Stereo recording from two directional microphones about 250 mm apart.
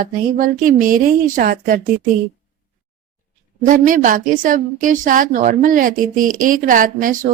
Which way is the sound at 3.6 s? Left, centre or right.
Right.